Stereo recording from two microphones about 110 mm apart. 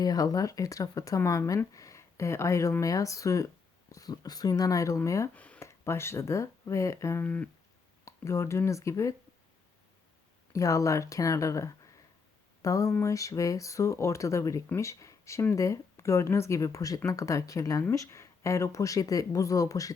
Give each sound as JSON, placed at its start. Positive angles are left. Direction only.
{"t": 0.0, "sound": "speech", "side_deg": 35}
{"t": 5.3, "sound": "a sound", "side_deg": 15}
{"t": 5.6, "sound": "speech", "side_deg": 25}
{"t": 7.3, "sound": "speech", "side_deg": 15}
{"t": 8.0, "sound": "speech", "side_deg": 25}
{"t": 10.5, "sound": "speech", "side_deg": 30}